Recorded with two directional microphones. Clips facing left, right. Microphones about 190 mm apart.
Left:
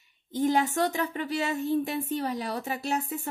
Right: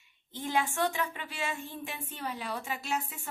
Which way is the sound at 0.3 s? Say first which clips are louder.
Left 7 dB; 40° left (ahead or behind).